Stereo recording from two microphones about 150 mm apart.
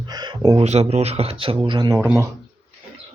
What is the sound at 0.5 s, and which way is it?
Speech, 45° right (ahead or behind).